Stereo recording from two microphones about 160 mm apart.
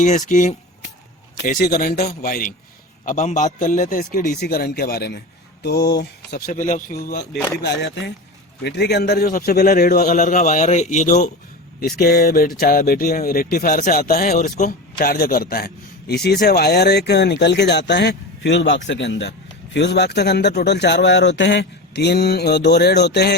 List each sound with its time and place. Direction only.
0.0 s a man's voice: 50° left (ahead or behind)
3.0 s a man's voice: 50° left (ahead or behind); by 5.9 s 90° left
6.0 s speech: 75° left (ahead or behind)
6.5 s a man's voice: 50° left (ahead or behind)
7.6 s a man's voice: 90° left
10.1 s a man's voice: 50° left (ahead or behind)
11.9 s a man's voice: 75° left (ahead or behind)
14.3 s a man's voice: 50° left (ahead or behind)
14.9 s a man's voice: 65° left (ahead or behind)
16.2 s a man's voice: 90° left